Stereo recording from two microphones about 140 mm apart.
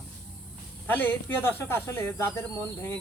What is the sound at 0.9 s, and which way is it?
Speech, 15° left (ahead or behind).